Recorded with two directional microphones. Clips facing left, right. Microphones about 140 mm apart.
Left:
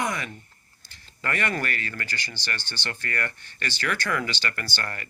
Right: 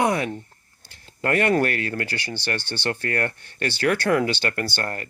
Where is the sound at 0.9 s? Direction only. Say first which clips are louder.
Right 7 dB; 50° right (ahead or behind).